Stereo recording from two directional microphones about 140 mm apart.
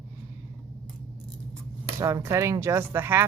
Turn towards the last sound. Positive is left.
turn(degrees=-15)  # may be behind; listen again after turning